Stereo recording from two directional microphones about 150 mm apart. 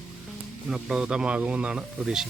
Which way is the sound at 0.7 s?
5° right (ahead or behind).